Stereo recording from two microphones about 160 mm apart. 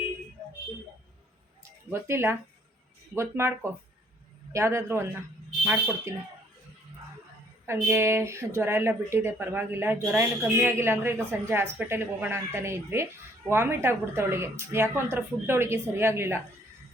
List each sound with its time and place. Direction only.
1.9 s a woman's voice: 15° right (ahead or behind)
7.7 s a woman's voice: 15° right (ahead or behind)